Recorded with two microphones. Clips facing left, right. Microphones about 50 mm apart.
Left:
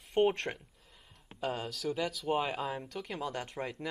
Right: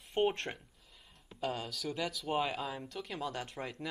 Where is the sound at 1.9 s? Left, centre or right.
Centre.